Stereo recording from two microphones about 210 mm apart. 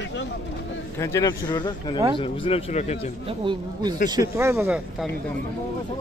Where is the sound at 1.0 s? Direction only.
15° left (ahead or behind); by 3.1 s 30° left (ahead or behind).